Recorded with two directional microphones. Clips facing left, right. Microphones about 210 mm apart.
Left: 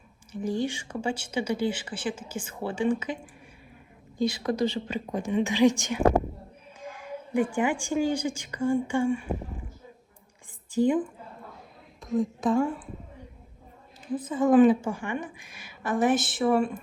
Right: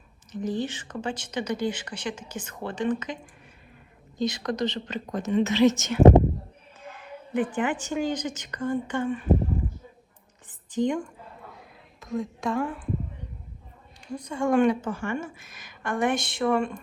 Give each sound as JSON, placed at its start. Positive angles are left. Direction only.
{"t": 0.3, "sound": "speech", "side_deg": 10}
{"t": 4.2, "sound": "speech", "side_deg": 10}
{"t": 6.0, "sound": "speech", "side_deg": -25}
{"t": 6.8, "sound": "a sound", "side_deg": 10}
{"t": 7.5, "sound": "speech", "side_deg": 10}
{"t": 10.5, "sound": "whispering", "side_deg": 10}
{"t": 11.9, "sound": "a woman's voice", "side_deg": 0}
{"t": 14.1, "sound": "a woman's voice", "side_deg": 5}